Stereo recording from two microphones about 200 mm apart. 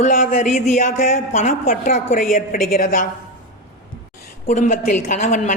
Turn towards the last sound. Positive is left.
turn(degrees=35)  # may be behind; listen again after turning